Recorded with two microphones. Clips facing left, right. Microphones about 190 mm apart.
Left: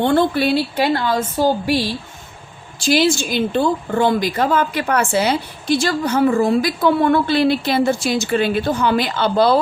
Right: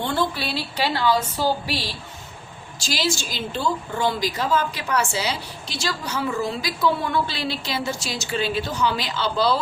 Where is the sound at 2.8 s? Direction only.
55° left (ahead or behind).